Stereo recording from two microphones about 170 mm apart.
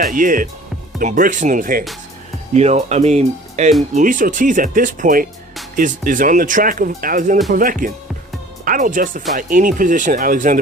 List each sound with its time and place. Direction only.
0.0 s speech: 55° right (ahead or behind)
2.6 s speech: 40° right (ahead or behind)
3.9 s speech: 50° right (ahead or behind)